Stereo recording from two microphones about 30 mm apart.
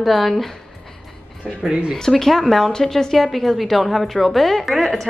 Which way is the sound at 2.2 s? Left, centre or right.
Centre.